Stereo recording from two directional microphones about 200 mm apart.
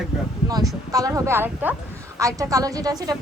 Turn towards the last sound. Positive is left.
turn(degrees=-20)  # may be behind; listen again after turning